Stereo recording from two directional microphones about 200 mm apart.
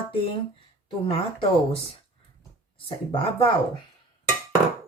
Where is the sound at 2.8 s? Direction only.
25° left (ahead or behind).